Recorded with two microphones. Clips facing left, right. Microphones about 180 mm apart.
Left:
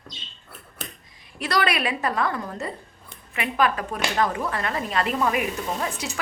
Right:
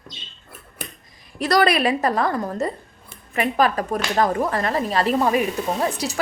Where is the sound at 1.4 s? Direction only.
40° right (ahead or behind).